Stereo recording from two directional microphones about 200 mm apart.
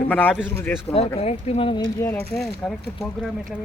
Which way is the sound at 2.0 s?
10° left (ahead or behind).